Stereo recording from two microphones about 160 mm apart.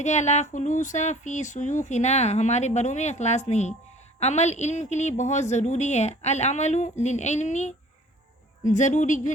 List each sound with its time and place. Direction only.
0.0 s speech: 45° left (ahead or behind)